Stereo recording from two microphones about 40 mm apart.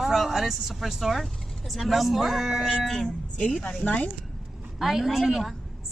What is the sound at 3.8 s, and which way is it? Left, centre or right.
Speech, left.